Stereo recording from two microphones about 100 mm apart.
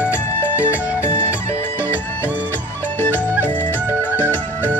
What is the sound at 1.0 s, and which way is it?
Music, 25° left (ahead or behind).